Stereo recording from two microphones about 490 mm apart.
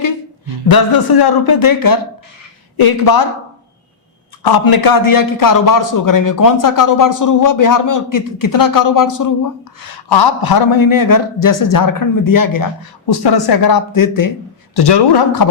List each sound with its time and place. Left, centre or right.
0.0 s speech: left
4.4 s a man's voice: left
9.8 s a man's voice: left
14.8 s speech: left